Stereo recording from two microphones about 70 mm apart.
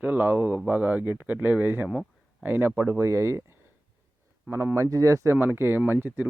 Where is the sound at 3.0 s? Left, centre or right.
Right.